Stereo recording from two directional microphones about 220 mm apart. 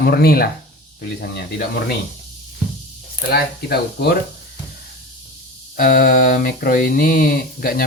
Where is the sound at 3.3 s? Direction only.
45° left (ahead or behind).